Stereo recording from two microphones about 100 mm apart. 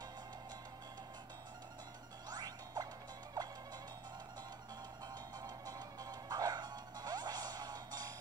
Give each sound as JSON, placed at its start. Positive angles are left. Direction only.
{"t": 2.2, "sound": "whack", "side_deg": -40}
{"t": 3.4, "sound": "music", "side_deg": -45}
{"t": 5.4, "sound": "music", "side_deg": -40}